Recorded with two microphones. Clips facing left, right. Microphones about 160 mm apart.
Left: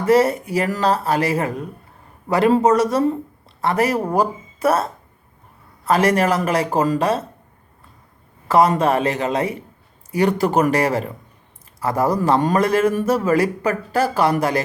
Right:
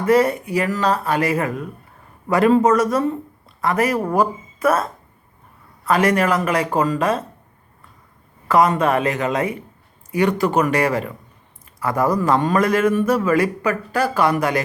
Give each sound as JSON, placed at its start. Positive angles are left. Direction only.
{"t": 0.0, "sound": "a man's voice", "side_deg": 40}
{"t": 8.4, "sound": "a man's voice", "side_deg": 35}